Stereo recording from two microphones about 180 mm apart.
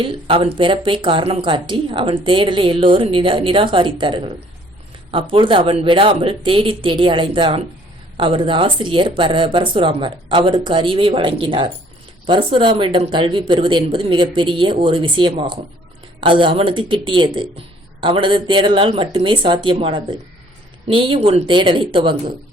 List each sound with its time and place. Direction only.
0.0 s a woman's voice: 30° right (ahead or behind)
5.3 s a woman's voice: 30° right (ahead or behind)